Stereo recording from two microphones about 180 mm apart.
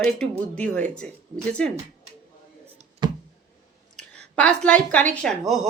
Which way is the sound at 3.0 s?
25° right (ahead or behind).